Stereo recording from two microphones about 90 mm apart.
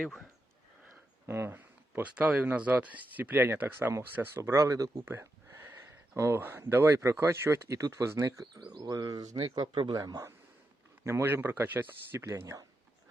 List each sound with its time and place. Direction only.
0.0 s speech: 5° left (ahead or behind)
1.3 s speech: 25° right (ahead or behind)
5.0 s a sound: 25° right (ahead or behind)
5.7 s speech: 30° right (ahead or behind)
8.6 s speech: 45° right (ahead or behind); by 12.6 s 30° right (ahead or behind)